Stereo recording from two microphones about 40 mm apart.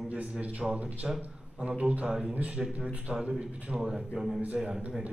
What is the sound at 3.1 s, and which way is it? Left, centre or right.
Speech, right.